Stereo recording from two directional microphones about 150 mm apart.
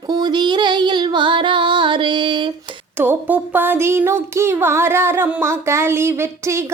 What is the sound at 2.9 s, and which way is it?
Female singing, 15° right (ahead or behind).